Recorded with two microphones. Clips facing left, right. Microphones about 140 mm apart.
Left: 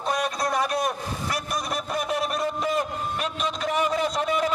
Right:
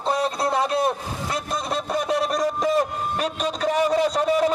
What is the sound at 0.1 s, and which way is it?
Speech, 30° right (ahead or behind).